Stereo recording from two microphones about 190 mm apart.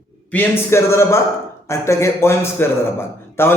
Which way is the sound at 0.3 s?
10° left (ahead or behind).